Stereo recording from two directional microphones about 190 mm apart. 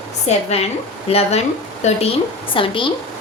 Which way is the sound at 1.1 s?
30° left (ahead or behind).